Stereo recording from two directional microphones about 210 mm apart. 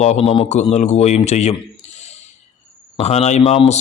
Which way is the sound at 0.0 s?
30° left (ahead or behind).